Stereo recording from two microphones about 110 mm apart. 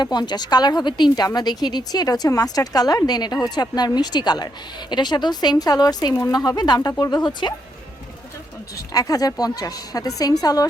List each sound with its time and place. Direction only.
0.0 s a woman's voice: 40° left (ahead or behind)
8.9 s a woman's voice: 35° left (ahead or behind)